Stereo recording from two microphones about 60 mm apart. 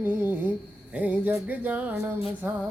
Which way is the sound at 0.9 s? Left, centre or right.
Right.